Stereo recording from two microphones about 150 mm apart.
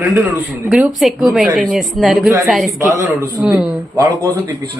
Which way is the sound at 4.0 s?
20° right (ahead or behind).